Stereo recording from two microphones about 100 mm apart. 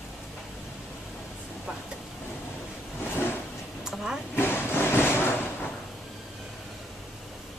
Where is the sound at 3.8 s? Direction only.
5° right (ahead or behind).